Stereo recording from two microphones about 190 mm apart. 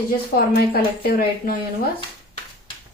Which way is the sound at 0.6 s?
50° left (ahead or behind).